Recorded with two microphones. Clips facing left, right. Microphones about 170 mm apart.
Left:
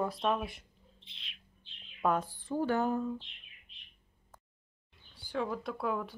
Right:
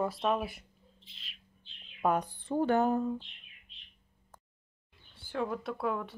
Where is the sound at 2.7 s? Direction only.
50° right (ahead or behind).